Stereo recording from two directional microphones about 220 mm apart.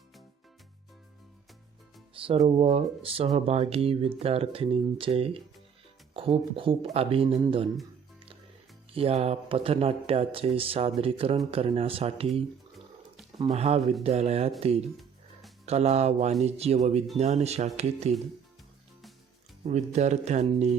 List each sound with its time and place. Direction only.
2.1 s speech: 25° right (ahead or behind)
9.0 s speech: 25° right (ahead or behind)
12.3 s a sound: centre (ahead or behind)
13.6 s speech: 30° right (ahead or behind)
14.9 s music: centre (ahead or behind)
15.6 s speech: 30° right (ahead or behind)
19.6 s speech: 30° right (ahead or behind)